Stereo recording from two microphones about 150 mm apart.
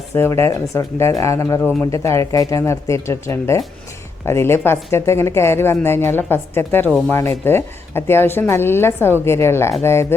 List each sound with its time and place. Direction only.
0.1 s a woman's voice: 20° left (ahead or behind)